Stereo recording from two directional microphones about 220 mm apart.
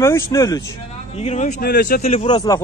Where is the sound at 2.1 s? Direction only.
20° left (ahead or behind).